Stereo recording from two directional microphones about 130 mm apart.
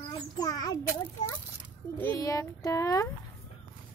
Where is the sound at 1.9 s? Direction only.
15° left (ahead or behind).